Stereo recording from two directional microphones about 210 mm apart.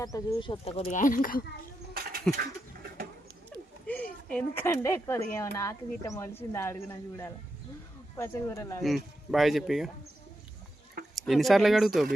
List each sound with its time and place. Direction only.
0.0 s speech: 15° left (ahead or behind); by 1.5 s 40° left (ahead or behind)
1.9 s a sound: 45° right (ahead or behind)
3.8 s speech: 5° left (ahead or behind)
8.8 s speech: centre (ahead or behind)
11.1 s speech: centre (ahead or behind)